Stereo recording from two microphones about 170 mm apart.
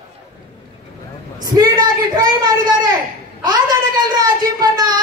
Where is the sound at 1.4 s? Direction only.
20° right (ahead or behind).